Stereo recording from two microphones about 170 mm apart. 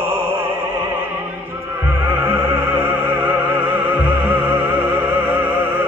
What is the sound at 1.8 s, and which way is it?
Opera, 15° right (ahead or behind).